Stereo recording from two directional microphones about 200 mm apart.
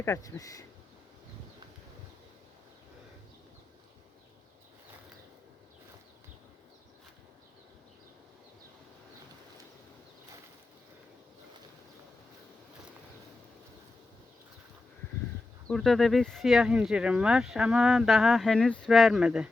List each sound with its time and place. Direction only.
0.0 s speech: 15° left (ahead or behind)
15.6 s speech: centre (ahead or behind)